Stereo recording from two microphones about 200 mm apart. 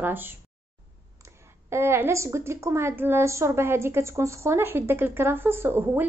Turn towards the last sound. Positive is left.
turn(degrees=-10)  # may be behind; listen again after turning